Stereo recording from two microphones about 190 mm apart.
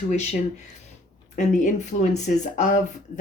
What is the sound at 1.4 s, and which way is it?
Speech, 40° left (ahead or behind).